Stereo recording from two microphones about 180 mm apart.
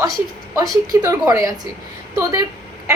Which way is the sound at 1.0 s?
20° right (ahead or behind).